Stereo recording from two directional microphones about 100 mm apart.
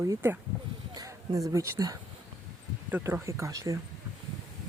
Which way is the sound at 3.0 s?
30° right (ahead or behind).